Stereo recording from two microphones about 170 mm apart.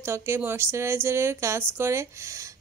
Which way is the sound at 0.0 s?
15° right (ahead or behind).